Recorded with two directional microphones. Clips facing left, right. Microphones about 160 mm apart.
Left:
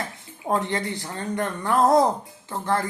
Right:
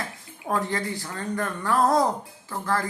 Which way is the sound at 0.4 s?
20° left (ahead or behind).